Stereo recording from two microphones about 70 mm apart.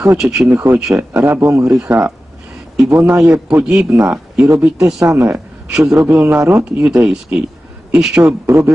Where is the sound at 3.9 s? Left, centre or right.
Right.